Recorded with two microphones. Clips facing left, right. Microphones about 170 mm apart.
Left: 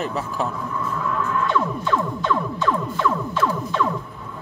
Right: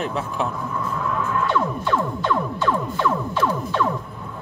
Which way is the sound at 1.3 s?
Centre (ahead or behind).